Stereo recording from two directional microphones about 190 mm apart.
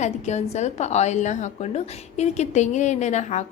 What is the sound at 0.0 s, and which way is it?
A woman's voice, 35° left (ahead or behind).